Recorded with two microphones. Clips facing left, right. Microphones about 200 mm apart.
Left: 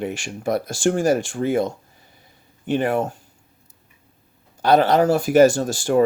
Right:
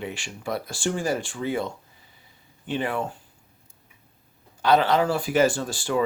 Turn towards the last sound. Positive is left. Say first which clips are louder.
# left 7 dB
turn(degrees=45)  # may be behind; listen again after turning